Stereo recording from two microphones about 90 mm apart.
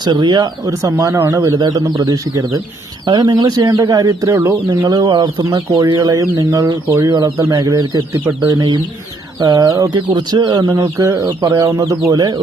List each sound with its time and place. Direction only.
0.0 s speech: 55° right (ahead or behind)
0.8 s speech: 40° right (ahead or behind)
1.4 s speech: 45° right (ahead or behind)
6.0 s speech: 40° right (ahead or behind)
9.9 s speech: 55° right (ahead or behind)
10.8 s speech: 40° right (ahead or behind)